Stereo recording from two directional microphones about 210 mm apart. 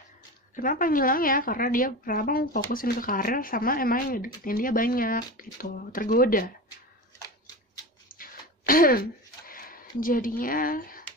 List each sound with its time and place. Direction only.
0.6 s a woman's voice: 40° left (ahead or behind)
7.2 s scissors: 20° left (ahead or behind)
8.1 s a sound: 45° left (ahead or behind)